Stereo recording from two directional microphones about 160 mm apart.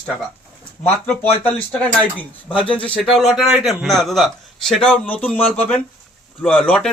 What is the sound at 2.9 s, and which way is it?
A man's voice, centre (ahead or behind).